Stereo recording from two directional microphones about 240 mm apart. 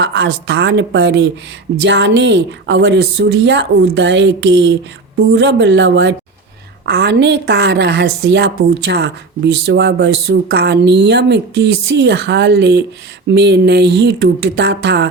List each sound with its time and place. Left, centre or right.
0.0 s a woman's voice: right